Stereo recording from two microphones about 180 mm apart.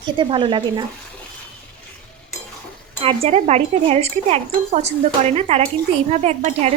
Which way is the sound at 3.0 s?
35° right (ahead or behind).